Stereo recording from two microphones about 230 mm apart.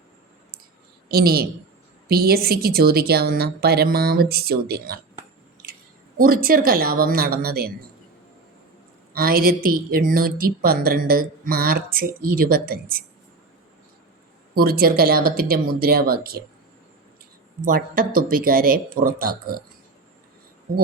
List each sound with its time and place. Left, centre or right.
1.0 s a woman's voice: right
6.1 s a woman's voice: right
9.1 s a woman's voice: right
14.5 s a woman's voice: right
17.7 s a woman's voice: right